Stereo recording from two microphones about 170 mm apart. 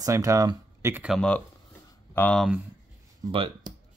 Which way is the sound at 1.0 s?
5° left (ahead or behind).